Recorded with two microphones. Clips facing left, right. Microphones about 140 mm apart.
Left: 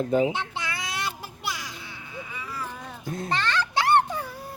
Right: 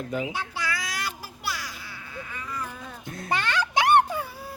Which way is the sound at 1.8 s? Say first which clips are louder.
Even; 20° left (ahead or behind).